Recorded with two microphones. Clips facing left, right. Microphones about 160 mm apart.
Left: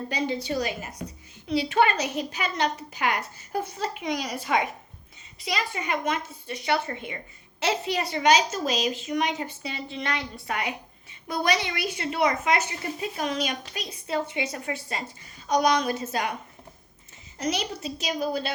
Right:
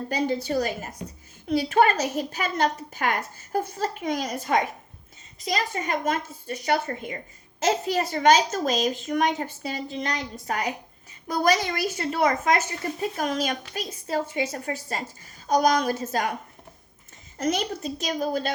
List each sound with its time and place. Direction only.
0.1 s a woman's voice: 45° right (ahead or behind)
17.3 s a woman's voice: 50° right (ahead or behind)